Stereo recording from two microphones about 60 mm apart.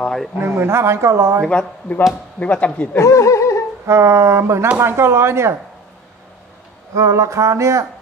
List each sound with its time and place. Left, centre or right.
0.4 s speech: right
1.4 s speech: centre
2.4 s a man's voice: left
3.0 s speech: left
3.8 s speech: right
7.0 s a sound: right